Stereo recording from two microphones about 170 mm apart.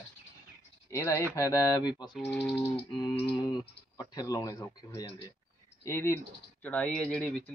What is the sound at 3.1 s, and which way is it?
Music, 35° left (ahead or behind).